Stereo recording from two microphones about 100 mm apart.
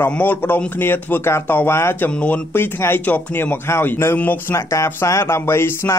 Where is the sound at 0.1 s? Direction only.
15° left (ahead or behind).